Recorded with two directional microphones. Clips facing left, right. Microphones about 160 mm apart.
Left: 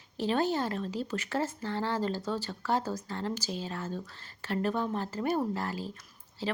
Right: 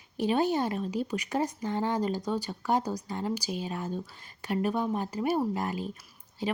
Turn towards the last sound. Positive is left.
turn(degrees=-20)  # may be behind; listen again after turning